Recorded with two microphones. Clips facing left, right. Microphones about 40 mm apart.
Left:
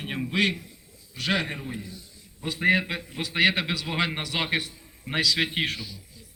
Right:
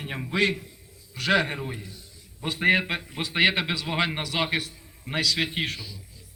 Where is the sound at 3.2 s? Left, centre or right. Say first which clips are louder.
Even; centre.